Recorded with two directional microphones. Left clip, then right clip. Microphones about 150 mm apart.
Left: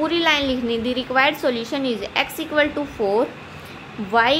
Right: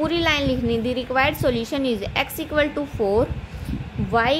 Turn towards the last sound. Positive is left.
turn(degrees=-20)  # may be behind; listen again after turning